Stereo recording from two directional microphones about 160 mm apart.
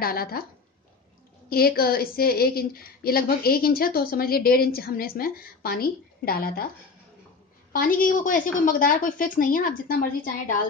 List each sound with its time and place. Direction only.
0.0 s a woman's voice: 70° left (ahead or behind)
1.5 s a woman's voice: 70° left (ahead or behind)
7.7 s a woman's voice: 60° left (ahead or behind)